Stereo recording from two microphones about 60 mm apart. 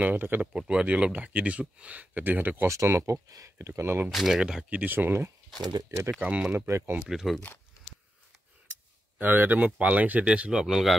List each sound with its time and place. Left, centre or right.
0.0 s speech: right
0.5 s speech: centre; by 2.7 s right
2.7 s speech: right
3.3 s speech: right
4.1 s speech: centre
4.6 s speech: right
5.9 s speech: right
6.7 s speech: right
7.1 s speech: centre
9.2 s speech: right; by 10.9 s centre